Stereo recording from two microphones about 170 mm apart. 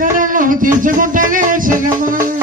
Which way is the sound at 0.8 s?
50° right (ahead or behind).